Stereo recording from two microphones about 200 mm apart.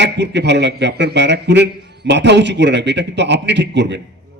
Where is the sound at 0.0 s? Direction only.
60° right (ahead or behind).